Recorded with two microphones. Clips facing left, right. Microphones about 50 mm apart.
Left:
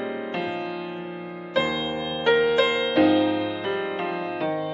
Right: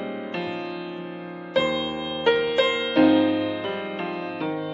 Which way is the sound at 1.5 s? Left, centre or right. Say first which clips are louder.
Right 1 dB; centre.